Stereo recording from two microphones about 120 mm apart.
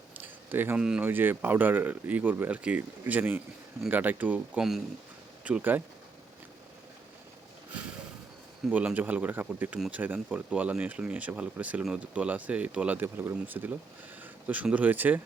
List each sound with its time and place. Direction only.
0.2 s a sound: 15° right (ahead or behind)
1.0 s speech: 15° right (ahead or behind)
8.7 s speech: 10° right (ahead or behind)